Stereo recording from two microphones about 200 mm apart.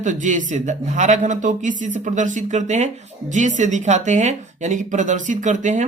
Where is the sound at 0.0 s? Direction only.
40° right (ahead or behind).